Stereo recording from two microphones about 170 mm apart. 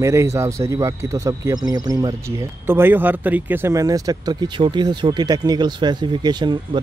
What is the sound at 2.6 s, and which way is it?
Speech, 15° right (ahead or behind).